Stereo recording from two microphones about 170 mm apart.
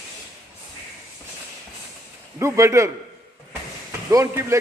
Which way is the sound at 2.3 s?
20° right (ahead or behind).